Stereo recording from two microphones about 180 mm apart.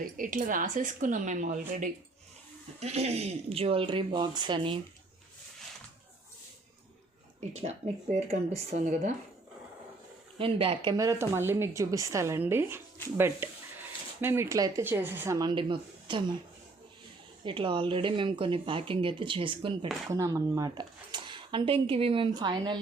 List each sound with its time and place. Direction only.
0.0 s a woman's voice: 50° right (ahead or behind); by 4.8 s 25° right (ahead or behind)
8.1 s speech: 40° right (ahead or behind)
10.3 s speech: 30° right (ahead or behind)
10.9 s a woman's voice: 15° right (ahead or behind)
17.4 s speech: 30° right (ahead or behind)
20.1 s speech: 20° right (ahead or behind)